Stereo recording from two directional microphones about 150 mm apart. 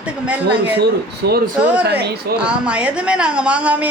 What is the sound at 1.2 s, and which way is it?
Speech, 90° right.